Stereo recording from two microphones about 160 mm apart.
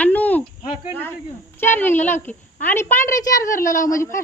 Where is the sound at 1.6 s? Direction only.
15° left (ahead or behind).